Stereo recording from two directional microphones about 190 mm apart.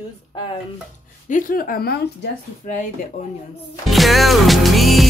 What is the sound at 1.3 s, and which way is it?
Speech, 45° left (ahead or behind).